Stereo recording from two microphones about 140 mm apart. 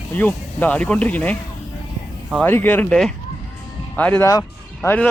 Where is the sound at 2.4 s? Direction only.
15° left (ahead or behind).